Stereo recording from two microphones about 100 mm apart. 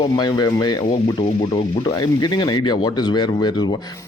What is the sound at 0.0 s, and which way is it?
Speech, 45° left (ahead or behind).